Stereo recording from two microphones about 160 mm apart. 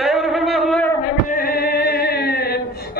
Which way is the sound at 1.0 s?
70° left (ahead or behind).